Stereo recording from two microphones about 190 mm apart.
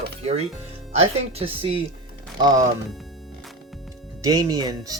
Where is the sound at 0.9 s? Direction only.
30° right (ahead or behind).